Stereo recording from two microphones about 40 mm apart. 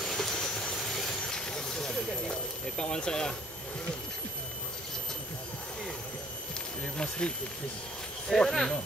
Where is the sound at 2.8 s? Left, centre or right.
Left.